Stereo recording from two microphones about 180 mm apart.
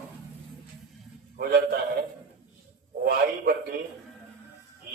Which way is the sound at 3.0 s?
55° right (ahead or behind).